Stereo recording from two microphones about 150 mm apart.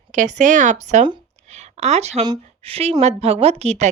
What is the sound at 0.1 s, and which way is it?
A woman's voice, 55° right (ahead or behind).